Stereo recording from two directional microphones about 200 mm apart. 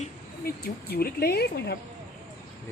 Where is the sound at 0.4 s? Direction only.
50° left (ahead or behind).